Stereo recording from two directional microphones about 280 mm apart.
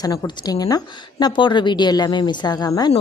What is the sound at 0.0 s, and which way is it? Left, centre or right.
Speech, centre.